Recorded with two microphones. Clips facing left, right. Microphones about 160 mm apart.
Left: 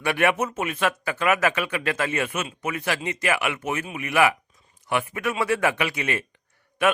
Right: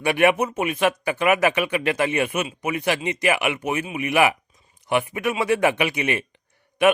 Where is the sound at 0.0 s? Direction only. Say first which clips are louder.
Right 4 dB; 15° right (ahead or behind).